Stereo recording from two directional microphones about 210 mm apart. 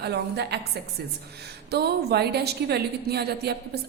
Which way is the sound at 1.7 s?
50° right (ahead or behind).